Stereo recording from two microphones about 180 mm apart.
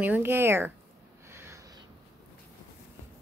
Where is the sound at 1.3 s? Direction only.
15° right (ahead or behind).